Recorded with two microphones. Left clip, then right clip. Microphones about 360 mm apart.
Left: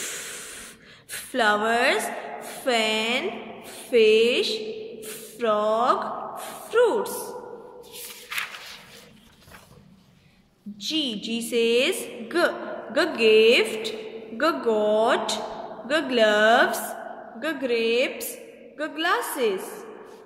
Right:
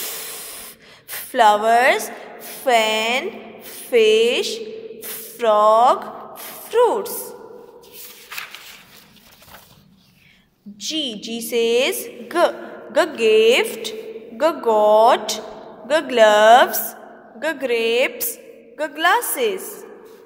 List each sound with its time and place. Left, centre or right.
0.0 s spray: centre
1.1 s a woman's voice: centre
5.0 s a sound: centre
10.8 s a woman's voice: centre